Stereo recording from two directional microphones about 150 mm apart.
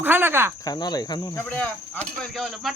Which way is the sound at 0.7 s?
25° left (ahead or behind).